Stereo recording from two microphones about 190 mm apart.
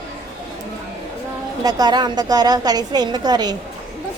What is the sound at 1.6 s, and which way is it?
A woman's voice, 20° right (ahead or behind).